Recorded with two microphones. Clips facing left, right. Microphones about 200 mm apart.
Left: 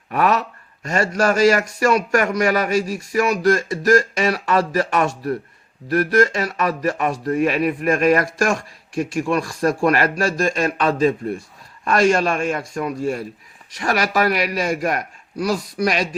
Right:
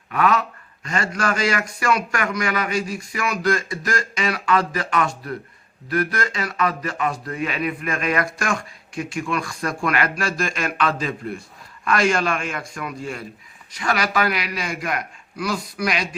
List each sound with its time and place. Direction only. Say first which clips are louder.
0.1 s speech: left 1 dB; 40° left (ahead or behind)